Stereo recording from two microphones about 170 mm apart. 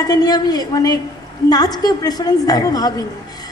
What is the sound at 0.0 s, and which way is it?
A woman's voice, 20° left (ahead or behind).